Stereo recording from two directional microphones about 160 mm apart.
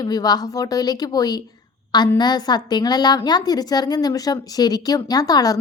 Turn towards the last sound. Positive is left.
turn(degrees=25)  # may be behind; listen again after turning